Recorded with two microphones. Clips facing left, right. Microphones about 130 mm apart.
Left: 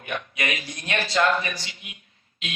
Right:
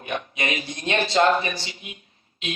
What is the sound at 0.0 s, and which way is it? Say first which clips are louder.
A man's voice: right 2 dB; 25° right (ahead or behind).